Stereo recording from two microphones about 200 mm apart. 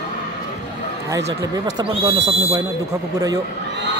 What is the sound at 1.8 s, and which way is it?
Speech, 25° right (ahead or behind).